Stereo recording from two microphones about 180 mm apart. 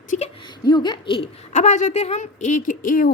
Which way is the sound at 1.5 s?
40° left (ahead or behind).